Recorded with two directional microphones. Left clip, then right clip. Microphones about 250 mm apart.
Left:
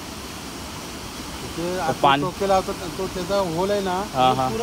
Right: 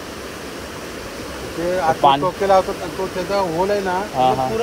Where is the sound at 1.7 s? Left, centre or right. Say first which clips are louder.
Right 4 dB; centre.